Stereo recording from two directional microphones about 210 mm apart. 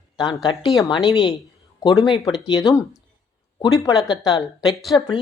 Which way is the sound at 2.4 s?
20° left (ahead or behind).